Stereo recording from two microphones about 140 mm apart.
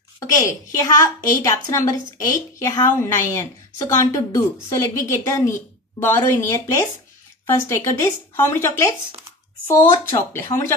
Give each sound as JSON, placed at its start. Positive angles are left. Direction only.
{"t": 0.7, "sound": "a woman's voice", "side_deg": 20}